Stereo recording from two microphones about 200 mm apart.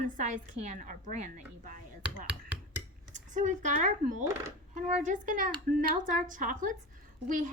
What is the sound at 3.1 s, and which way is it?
A woman's voice, 35° right (ahead or behind).